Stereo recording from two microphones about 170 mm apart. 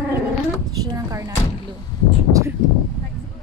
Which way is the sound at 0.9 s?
20° right (ahead or behind).